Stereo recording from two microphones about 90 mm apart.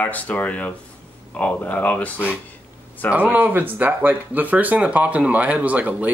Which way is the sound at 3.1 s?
20° right (ahead or behind).